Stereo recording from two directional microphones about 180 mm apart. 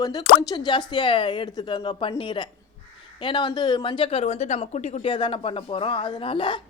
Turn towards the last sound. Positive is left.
turn(degrees=30)  # may be behind; listen again after turning